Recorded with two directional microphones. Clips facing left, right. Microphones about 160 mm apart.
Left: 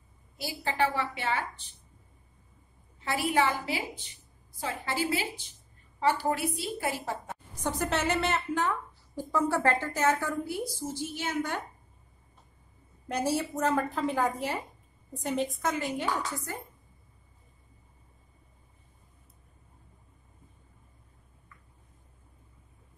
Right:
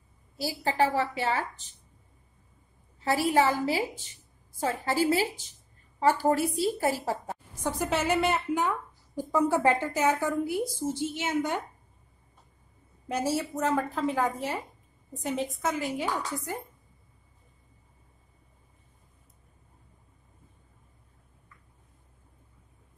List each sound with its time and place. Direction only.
0.4 s a woman's voice: 35° right (ahead or behind)
3.0 s a woman's voice: 40° right (ahead or behind)
7.6 s a woman's voice: 5° right (ahead or behind)
13.1 s a woman's voice: centre (ahead or behind)